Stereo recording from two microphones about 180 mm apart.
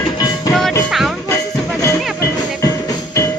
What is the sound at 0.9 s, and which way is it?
Music, centre (ahead or behind).